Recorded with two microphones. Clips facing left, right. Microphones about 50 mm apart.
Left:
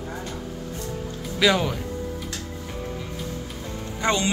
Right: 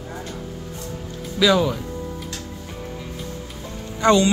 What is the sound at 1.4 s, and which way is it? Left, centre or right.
Speech, left.